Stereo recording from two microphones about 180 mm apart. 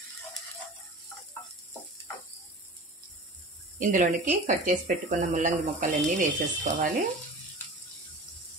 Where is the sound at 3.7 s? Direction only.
45° right (ahead or behind).